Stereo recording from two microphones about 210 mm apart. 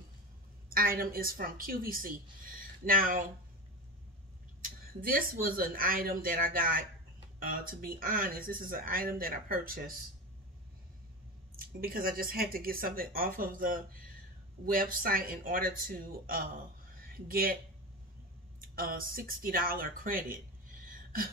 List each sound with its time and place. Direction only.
0.7 s speech: 45° right (ahead or behind)
4.6 s speech: 40° right (ahead or behind)
11.5 s speech: 45° right (ahead or behind)
18.6 s speech: 45° right (ahead or behind)